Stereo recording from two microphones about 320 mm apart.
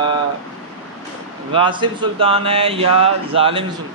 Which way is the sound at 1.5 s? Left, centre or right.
Centre.